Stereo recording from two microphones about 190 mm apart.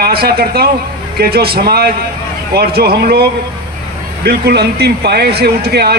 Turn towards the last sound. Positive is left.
turn(degrees=-55)  # may be behind; listen again after turning